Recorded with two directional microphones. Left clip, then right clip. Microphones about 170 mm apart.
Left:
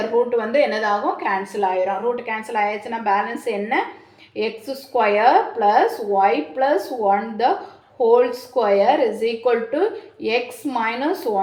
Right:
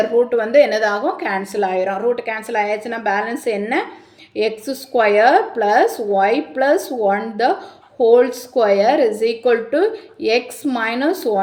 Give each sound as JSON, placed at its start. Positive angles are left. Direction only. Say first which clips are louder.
{"t": 0.3, "sound": "a woman's voice", "louder": "right 5 dB", "side_deg": -35}